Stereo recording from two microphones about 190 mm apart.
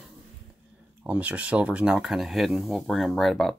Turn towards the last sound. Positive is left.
turn(degrees=0)  # may be behind; listen again after turning